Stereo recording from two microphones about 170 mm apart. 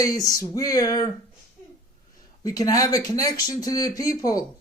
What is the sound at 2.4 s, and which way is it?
Speech, 20° left (ahead or behind).